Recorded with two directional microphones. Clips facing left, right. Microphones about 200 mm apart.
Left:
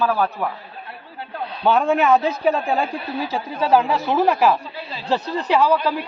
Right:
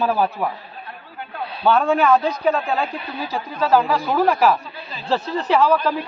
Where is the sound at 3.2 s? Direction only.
25° left (ahead or behind).